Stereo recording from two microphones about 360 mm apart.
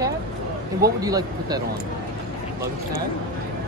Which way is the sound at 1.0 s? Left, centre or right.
Centre.